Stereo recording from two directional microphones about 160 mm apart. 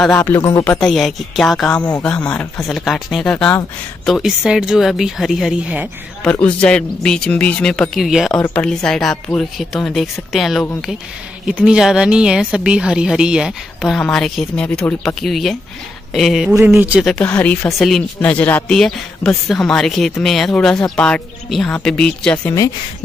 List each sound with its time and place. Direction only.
0.0 s speech: 10° left (ahead or behind)
0.7 s speech: centre (ahead or behind)
1.8 s speech: 25° left (ahead or behind)
2.0 s speech: 5° left (ahead or behind)
6.2 s speech: 5° left (ahead or behind)
16.5 s speech: 15° right (ahead or behind)
17.0 s speech: 5° left (ahead or behind)